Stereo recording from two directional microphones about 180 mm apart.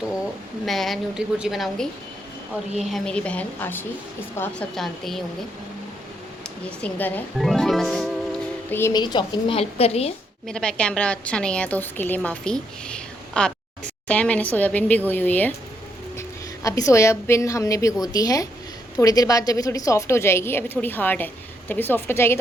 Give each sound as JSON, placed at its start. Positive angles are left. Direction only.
{"t": 0.6, "sound": "a woman's voice", "side_deg": 0}
{"t": 6.7, "sound": "speech", "side_deg": 5}
{"t": 8.7, "sound": "a woman's voice", "side_deg": 20}
{"t": 10.4, "sound": "a woman's voice", "side_deg": 5}
{"t": 12.9, "sound": "a sound", "side_deg": 5}
{"t": 14.1, "sound": "a woman's voice", "side_deg": 5}
{"t": 16.6, "sound": "a woman's voice", "side_deg": 20}